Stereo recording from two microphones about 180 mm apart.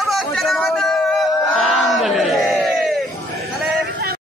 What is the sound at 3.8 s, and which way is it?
Vehicle, 60° right (ahead or behind).